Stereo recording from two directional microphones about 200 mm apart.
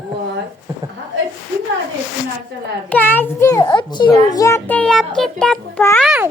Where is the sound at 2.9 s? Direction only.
10° left (ahead or behind).